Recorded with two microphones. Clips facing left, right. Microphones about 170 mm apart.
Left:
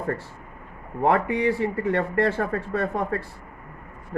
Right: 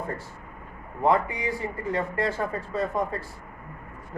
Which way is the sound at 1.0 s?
60° left (ahead or behind).